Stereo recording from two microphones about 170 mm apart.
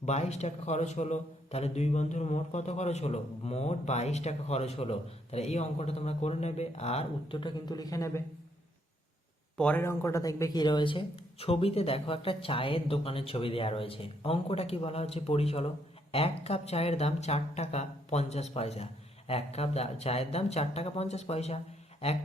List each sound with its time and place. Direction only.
0.0 s a man's voice: 40° left (ahead or behind); by 8.2 s 20° left (ahead or behind)
9.6 s a man's voice: 10° left (ahead or behind); by 21.6 s 40° left (ahead or behind)